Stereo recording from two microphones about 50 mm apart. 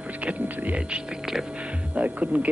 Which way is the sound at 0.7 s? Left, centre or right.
Centre.